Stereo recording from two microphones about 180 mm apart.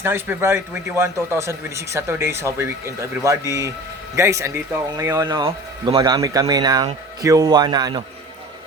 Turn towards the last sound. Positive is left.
turn(degrees=-25)  # may be behind; listen again after turning